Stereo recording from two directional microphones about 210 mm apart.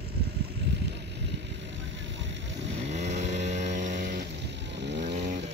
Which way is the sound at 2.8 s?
35° right (ahead or behind).